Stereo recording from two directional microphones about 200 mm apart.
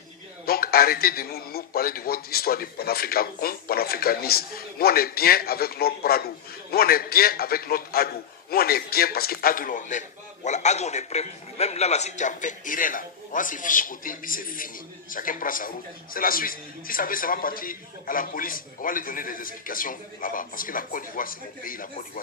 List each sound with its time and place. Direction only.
0.4 s a man's voice: 50° left (ahead or behind)